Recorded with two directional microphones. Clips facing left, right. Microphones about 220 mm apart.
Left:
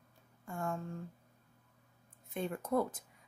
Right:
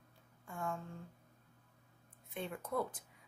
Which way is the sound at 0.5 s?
45° left (ahead or behind).